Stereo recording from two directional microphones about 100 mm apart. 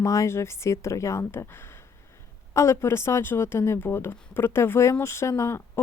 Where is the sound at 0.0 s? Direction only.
30° left (ahead or behind).